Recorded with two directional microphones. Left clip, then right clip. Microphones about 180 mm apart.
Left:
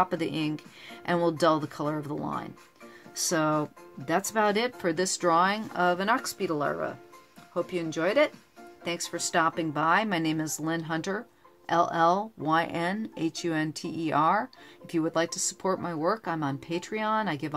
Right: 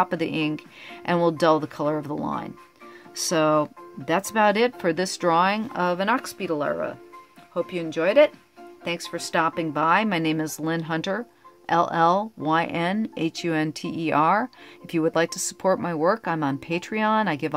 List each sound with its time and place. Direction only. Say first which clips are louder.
0.0 s speech: right 4 dB; 30° right (ahead or behind)